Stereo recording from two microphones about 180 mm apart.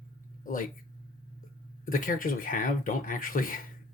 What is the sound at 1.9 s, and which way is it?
Speech, 50° left (ahead or behind).